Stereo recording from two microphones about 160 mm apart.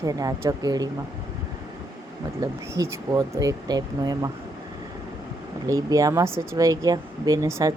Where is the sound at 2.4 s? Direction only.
20° right (ahead or behind).